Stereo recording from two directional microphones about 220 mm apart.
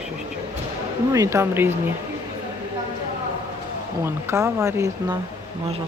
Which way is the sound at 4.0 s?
10° right (ahead or behind).